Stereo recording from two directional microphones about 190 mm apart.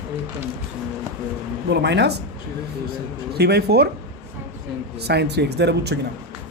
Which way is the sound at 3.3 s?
60° right (ahead or behind).